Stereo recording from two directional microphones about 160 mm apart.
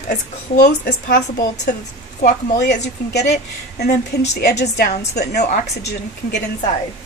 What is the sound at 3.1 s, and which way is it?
A woman's voice, 90° left.